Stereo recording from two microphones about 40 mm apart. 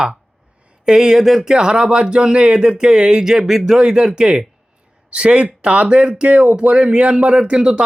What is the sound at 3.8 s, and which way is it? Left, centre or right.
Speech, right.